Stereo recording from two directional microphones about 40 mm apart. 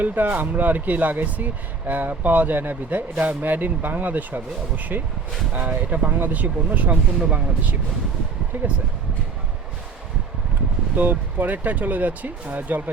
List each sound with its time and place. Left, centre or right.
0.0 s speech: right
10.9 s speech: right